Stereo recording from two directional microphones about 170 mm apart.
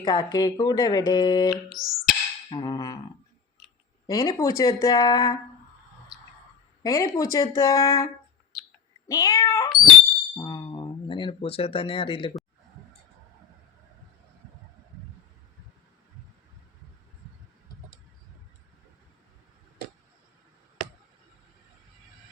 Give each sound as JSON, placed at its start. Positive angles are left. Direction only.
{"t": 0.0, "sound": "speech", "side_deg": 25}
{"t": 1.7, "sound": "music", "side_deg": 0}
{"t": 2.5, "sound": "speech", "side_deg": 25}
{"t": 4.0, "sound": "speech", "side_deg": 20}
{"t": 6.8, "sound": "speech", "side_deg": 20}
{"t": 8.5, "sound": "a sound", "side_deg": 0}
{"t": 9.0, "sound": "speech", "side_deg": 20}
{"t": 10.3, "sound": "a sound", "side_deg": 25}